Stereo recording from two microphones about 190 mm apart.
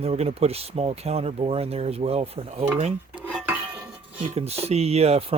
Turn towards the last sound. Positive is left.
turn(degrees=-30)  # may be behind; listen again after turning